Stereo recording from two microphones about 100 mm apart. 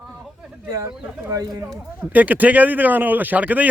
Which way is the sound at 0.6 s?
25° right (ahead or behind).